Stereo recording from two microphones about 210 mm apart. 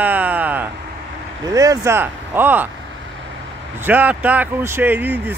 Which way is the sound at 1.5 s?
15° right (ahead or behind).